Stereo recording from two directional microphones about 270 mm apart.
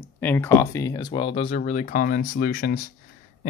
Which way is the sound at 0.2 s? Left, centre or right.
Centre.